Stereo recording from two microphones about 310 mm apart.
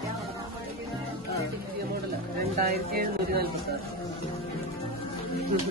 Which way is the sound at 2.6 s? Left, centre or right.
Right.